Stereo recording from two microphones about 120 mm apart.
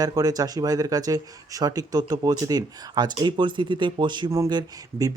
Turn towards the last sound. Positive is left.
turn(degrees=-35)  # may be behind; listen again after turning